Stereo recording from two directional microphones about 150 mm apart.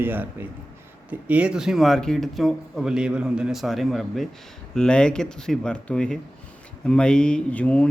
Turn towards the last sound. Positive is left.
turn(degrees=10)  # may be behind; listen again after turning